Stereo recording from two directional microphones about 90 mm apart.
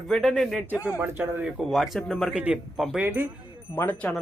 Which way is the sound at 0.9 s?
20° right (ahead or behind).